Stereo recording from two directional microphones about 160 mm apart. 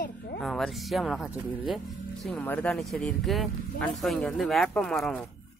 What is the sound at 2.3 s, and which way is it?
Speech, 10° left (ahead or behind).